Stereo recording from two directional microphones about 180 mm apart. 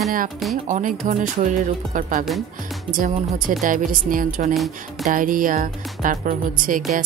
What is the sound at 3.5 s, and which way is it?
Speech, 50° right (ahead or behind).